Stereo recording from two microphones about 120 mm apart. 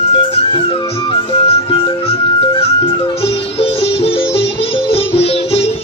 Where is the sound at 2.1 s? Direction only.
55° left (ahead or behind).